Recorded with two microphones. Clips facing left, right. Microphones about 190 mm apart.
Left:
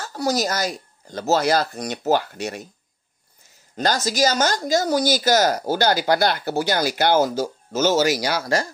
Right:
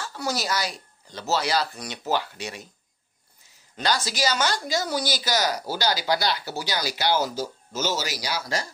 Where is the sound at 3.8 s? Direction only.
45° left (ahead or behind).